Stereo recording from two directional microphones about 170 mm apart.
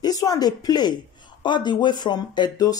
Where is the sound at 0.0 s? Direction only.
20° left (ahead or behind).